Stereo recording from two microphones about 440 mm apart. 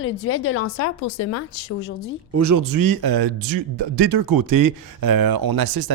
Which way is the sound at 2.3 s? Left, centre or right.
Right.